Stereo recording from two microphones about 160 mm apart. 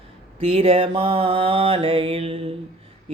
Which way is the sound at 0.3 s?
35° right (ahead or behind).